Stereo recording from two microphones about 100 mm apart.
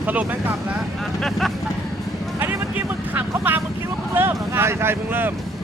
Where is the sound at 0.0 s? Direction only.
15° right (ahead or behind).